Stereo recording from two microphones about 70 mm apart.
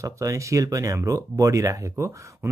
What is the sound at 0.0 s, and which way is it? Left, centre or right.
Speech, right.